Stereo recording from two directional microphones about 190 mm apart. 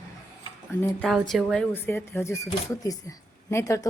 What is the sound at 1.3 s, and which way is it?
Speech, centre (ahead or behind).